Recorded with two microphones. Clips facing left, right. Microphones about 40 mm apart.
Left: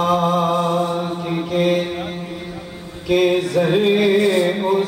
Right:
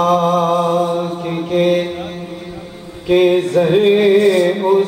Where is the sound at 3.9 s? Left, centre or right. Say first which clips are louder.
Right 4 dB; right.